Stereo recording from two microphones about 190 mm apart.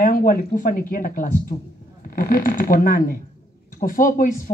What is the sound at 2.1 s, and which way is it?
A woman's voice, 45° left (ahead or behind).